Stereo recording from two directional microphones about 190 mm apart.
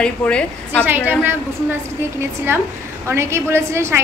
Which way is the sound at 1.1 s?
10° right (ahead or behind).